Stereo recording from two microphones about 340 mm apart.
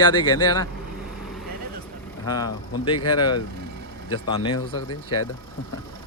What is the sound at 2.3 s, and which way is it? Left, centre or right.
Speech, centre.